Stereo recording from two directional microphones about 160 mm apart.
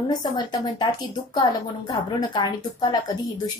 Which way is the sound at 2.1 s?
25° left (ahead or behind).